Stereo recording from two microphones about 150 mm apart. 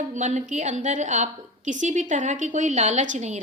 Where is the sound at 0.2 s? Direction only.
50° right (ahead or behind).